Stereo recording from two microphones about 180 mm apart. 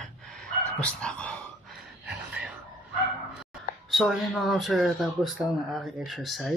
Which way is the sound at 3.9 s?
Centre (ahead or behind).